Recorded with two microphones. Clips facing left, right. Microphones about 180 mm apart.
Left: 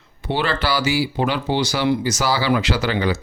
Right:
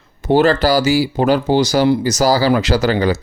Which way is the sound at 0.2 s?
45° right (ahead or behind).